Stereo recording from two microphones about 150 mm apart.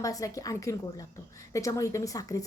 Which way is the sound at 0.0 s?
20° left (ahead or behind).